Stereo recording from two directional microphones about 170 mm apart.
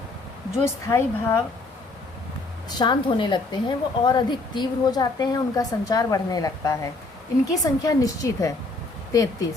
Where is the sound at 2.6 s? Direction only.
25° left (ahead or behind).